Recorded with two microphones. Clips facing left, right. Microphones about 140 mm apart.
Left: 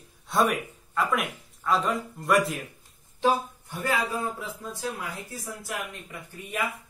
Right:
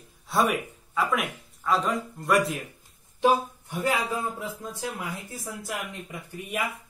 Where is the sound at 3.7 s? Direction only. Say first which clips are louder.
Right 1 dB; 15° right (ahead or behind).